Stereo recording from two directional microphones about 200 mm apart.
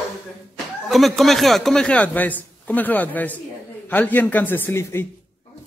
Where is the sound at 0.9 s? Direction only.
Centre (ahead or behind).